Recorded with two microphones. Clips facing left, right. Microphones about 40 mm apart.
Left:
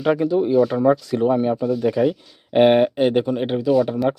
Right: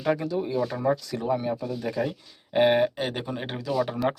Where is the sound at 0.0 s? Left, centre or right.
Left.